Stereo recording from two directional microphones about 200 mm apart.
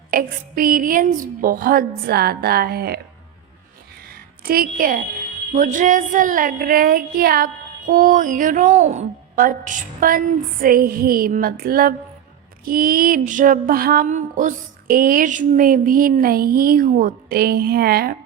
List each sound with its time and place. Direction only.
0.1 s child singing: 45° right (ahead or behind)
4.1 s a sound: 50° right (ahead or behind)
5.5 s child singing: 40° right (ahead or behind)